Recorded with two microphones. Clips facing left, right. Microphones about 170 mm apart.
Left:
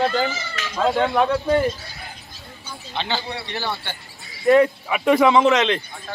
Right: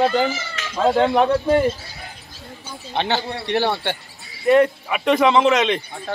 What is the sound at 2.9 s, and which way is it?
A man's voice, 60° right (ahead or behind).